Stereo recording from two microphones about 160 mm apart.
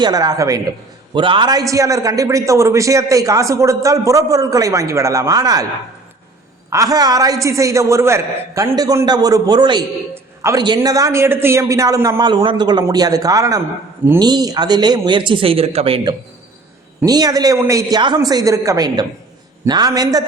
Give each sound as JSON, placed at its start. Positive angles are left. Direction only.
{"t": 0.0, "sound": "a man's voice", "side_deg": -25}
{"t": 6.7, "sound": "a man's voice", "side_deg": -20}
{"t": 17.1, "sound": "a man's voice", "side_deg": -25}